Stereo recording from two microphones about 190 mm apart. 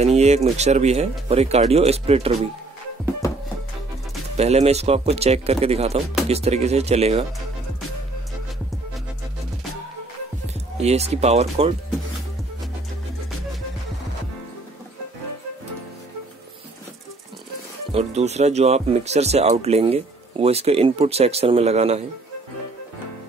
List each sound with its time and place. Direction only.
0.0 s speech: 35° right (ahead or behind)
4.4 s speech: 35° right (ahead or behind)
10.8 s speech: 35° right (ahead or behind)
17.9 s speech: 35° right (ahead or behind)